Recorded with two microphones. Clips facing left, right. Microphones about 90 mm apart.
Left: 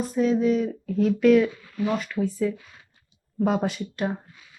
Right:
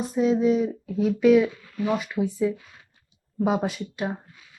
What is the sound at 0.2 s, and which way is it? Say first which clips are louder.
A woman's voice: right 1 dB; 20° right (ahead or behind).